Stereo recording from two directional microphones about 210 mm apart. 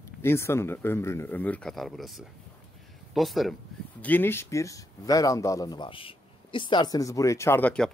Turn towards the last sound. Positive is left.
turn(degrees=5)  # may be behind; listen again after turning